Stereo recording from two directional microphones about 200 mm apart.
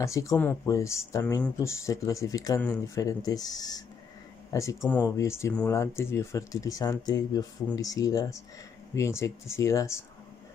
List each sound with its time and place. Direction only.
0.0 s speech: 15° left (ahead or behind)